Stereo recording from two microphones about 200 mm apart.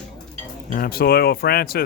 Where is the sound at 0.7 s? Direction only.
50° left (ahead or behind).